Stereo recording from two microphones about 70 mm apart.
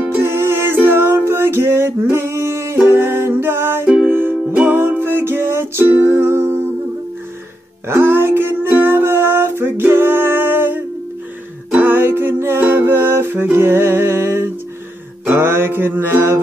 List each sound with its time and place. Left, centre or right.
0.2 s music: right
7.9 s music: right